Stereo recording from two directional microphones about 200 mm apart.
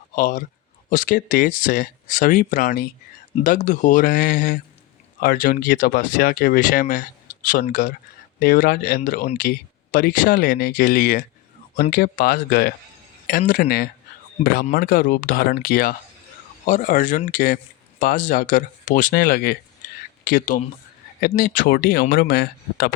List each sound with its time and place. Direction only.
0.2 s speech: 40° left (ahead or behind)